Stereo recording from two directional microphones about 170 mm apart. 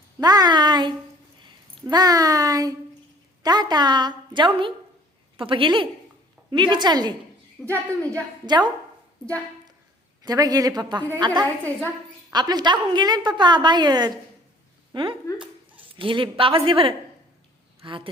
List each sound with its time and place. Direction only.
0.2 s a woman's voice: 25° right (ahead or behind)
10.2 s a woman's voice: 20° right (ahead or behind)